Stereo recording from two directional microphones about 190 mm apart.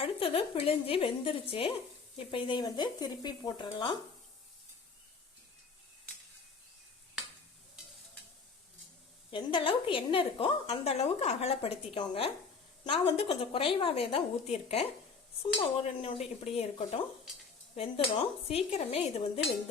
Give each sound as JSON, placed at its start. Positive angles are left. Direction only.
{"t": 0.0, "sound": "a woman's voice", "side_deg": 30}
{"t": 9.3, "sound": "a woman's voice", "side_deg": 25}
{"t": 15.5, "sound": "cutlery", "side_deg": 35}
{"t": 17.7, "sound": "cutlery", "side_deg": 30}